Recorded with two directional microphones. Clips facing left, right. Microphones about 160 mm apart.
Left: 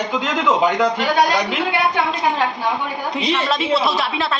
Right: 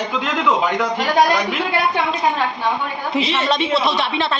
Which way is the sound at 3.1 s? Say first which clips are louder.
Right 2 dB; 5° right (ahead or behind).